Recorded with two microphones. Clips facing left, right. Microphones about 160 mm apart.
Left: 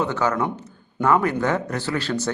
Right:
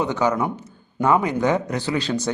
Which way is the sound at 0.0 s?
15° right (ahead or behind).